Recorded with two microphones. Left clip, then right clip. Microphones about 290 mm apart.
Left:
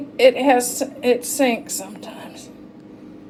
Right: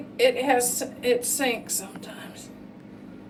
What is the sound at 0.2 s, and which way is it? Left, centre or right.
A woman's voice, left.